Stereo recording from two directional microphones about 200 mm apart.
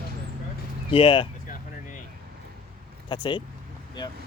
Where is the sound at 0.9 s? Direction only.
25° left (ahead or behind).